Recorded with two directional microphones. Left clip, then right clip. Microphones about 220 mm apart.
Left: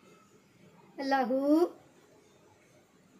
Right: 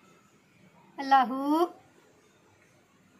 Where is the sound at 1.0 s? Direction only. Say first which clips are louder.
Right 5 dB; 40° right (ahead or behind).